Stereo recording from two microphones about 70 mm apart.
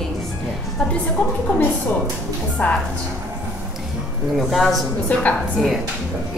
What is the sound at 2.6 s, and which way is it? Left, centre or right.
Speech, left.